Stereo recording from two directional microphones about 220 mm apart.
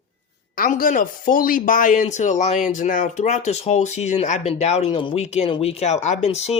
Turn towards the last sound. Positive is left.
turn(degrees=30)  # may be behind; listen again after turning